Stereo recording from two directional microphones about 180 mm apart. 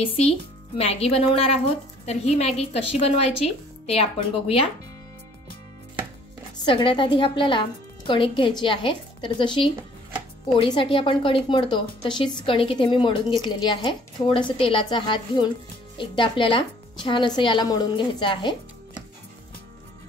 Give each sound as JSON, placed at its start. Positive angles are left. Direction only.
{"t": 0.0, "sound": "speech", "side_deg": 30}
{"t": 6.6, "sound": "a woman's voice", "side_deg": 30}